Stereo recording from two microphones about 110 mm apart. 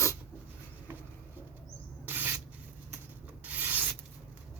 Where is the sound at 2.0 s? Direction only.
20° right (ahead or behind).